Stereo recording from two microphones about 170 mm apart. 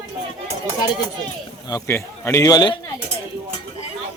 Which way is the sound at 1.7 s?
15° left (ahead or behind).